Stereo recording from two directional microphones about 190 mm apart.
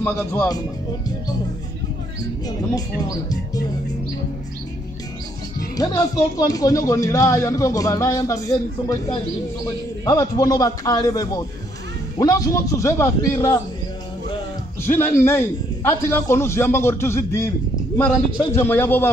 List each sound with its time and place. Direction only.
5.8 s speech: 20° left (ahead or behind)
10.0 s a man's voice: 20° left (ahead or behind)
14.8 s speech: 10° left (ahead or behind)